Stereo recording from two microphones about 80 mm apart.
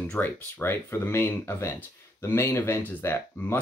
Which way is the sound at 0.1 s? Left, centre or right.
Left.